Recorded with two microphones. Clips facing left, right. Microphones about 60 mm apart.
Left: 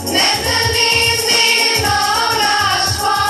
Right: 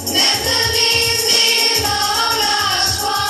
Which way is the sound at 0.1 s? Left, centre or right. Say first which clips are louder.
Left 3 dB; left.